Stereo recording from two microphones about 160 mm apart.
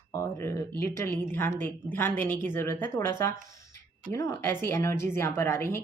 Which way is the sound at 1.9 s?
10° left (ahead or behind).